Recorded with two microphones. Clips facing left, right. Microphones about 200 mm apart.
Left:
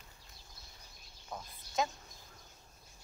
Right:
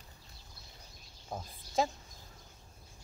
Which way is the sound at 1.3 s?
30° right (ahead or behind).